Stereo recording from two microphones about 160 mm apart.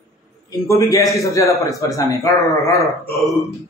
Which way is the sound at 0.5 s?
20° left (ahead or behind).